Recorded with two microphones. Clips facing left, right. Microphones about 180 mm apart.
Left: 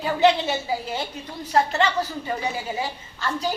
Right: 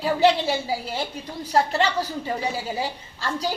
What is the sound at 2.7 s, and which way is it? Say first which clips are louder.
Speech: right 1 dB; 35° right (ahead or behind).